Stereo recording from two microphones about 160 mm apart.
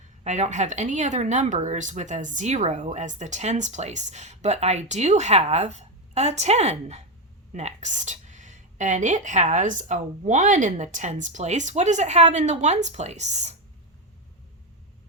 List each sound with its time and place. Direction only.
0.3 s speech: 45° right (ahead or behind)